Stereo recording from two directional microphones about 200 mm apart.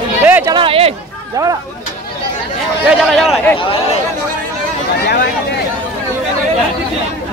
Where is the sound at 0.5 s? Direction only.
25° right (ahead or behind).